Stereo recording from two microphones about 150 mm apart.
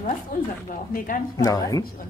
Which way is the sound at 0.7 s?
65° left (ahead or behind).